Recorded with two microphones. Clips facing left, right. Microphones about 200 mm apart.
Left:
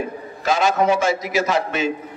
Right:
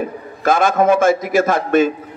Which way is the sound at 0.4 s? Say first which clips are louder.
Right 4 dB; 50° right (ahead or behind).